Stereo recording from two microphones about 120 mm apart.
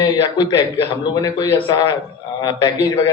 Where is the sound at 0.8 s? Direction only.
35° left (ahead or behind).